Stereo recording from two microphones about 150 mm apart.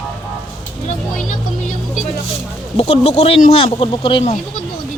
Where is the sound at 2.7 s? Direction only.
45° left (ahead or behind).